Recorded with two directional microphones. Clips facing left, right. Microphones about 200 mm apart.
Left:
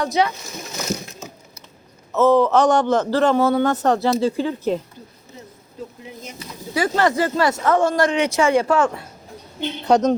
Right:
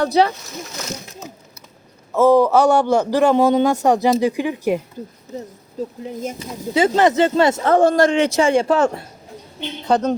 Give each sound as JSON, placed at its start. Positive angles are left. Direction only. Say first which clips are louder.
{"t": 0.0, "sound": "speech", "louder": "right 4 dB", "side_deg": -35}
{"t": 2.1, "sound": "a man's voice", "louder": "right 2 dB", "side_deg": -10}
{"t": 6.7, "sound": "speech", "louder": "right 4 dB", "side_deg": -20}
{"t": 9.6, "sound": "a woman's voice", "louder": "left 2 dB", "side_deg": 10}